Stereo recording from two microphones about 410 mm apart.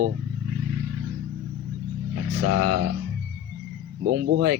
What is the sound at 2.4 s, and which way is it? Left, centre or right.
Speech, right.